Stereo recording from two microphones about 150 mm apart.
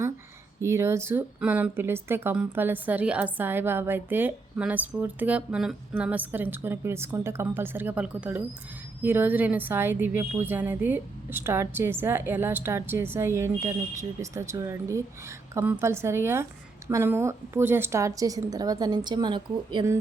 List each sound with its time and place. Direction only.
0.6 s a woman's voice: 20° right (ahead or behind)